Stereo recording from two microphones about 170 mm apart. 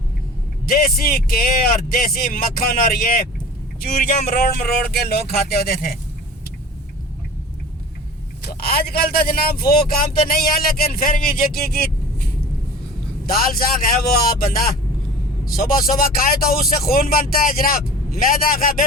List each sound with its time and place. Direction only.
0.6 s speech: 60° left (ahead or behind)
8.6 s speech: 60° left (ahead or behind)